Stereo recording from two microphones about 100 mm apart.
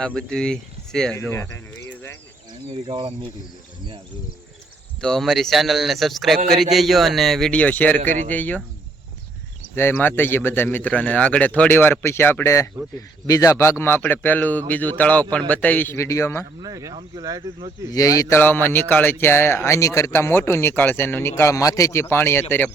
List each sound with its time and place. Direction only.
0.0 s speech: 10° left (ahead or behind)
1.3 s a sound: 25° left (ahead or behind)
2.6 s speech: 60° right (ahead or behind)
4.9 s a man's voice: 5° left (ahead or behind)
7.6 s a man's voice: 15° left (ahead or behind)
9.7 s a man's voice: 20° left (ahead or behind)
16.6 s speech: 35° right (ahead or behind)
17.9 s speech: 35° left (ahead or behind)
18.3 s speech: 20° left (ahead or behind)